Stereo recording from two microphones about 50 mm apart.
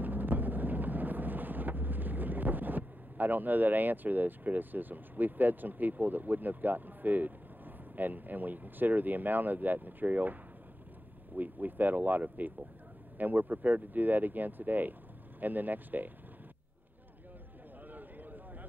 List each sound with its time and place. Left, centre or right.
0.0 s vehicle: right
11.3 s speech: right
17.9 s a sound: right